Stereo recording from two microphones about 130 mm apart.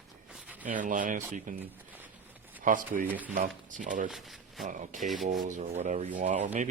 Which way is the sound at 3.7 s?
80° right.